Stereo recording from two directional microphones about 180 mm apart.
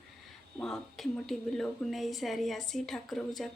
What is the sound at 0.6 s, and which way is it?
Speech, centre (ahead or behind).